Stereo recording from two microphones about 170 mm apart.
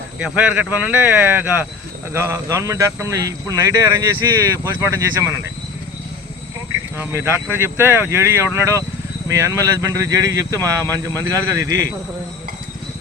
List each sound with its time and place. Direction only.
0.2 s speech: 5° right (ahead or behind)
6.9 s speech: 15° right (ahead or behind)